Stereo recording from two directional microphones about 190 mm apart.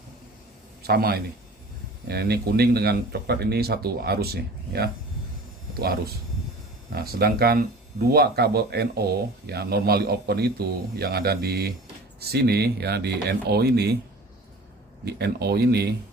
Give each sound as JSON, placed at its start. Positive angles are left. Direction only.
{"t": 0.8, "sound": "a man's voice", "side_deg": -55}
{"t": 6.9, "sound": "speech", "side_deg": -55}
{"t": 15.0, "sound": "speech", "side_deg": -60}